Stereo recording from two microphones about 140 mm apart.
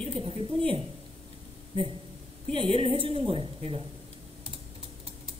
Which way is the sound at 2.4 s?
40° right (ahead or behind).